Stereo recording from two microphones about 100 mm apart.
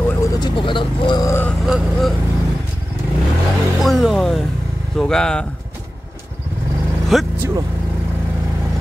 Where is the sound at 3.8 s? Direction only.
Centre (ahead or behind).